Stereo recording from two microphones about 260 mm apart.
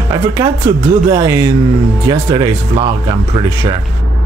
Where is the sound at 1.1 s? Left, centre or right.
Centre.